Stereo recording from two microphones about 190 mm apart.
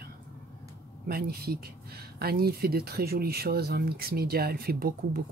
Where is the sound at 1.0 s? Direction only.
55° right (ahead or behind).